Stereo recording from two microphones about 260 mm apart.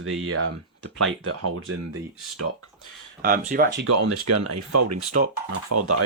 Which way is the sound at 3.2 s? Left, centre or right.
Right.